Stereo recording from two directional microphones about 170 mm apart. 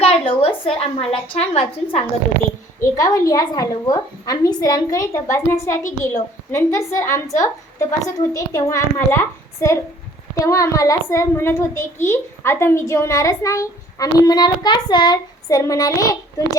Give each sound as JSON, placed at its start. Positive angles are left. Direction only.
{"t": 0.0, "sound": "a woman's voice", "side_deg": 35}
{"t": 2.9, "sound": "a child's voice", "side_deg": 20}